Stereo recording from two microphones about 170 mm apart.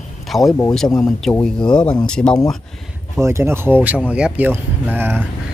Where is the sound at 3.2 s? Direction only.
15° right (ahead or behind).